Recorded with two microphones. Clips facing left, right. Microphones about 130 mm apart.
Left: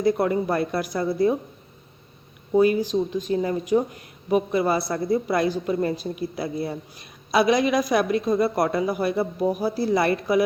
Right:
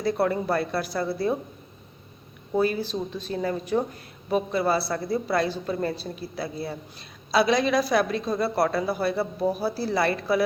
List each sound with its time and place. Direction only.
0.0 s a woman's voice: 15° left (ahead or behind)
2.6 s a woman's voice: 15° left (ahead or behind)